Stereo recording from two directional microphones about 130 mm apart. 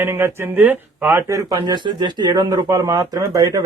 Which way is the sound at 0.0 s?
20° right (ahead or behind).